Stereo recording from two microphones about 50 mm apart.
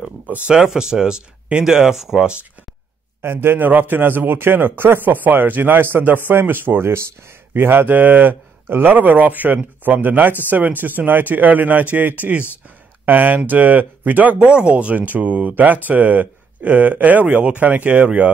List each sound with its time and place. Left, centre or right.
0.5 s speech: centre
3.2 s a man's voice: right